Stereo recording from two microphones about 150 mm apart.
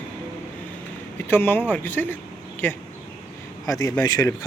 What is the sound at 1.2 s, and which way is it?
Speech, 15° left (ahead or behind).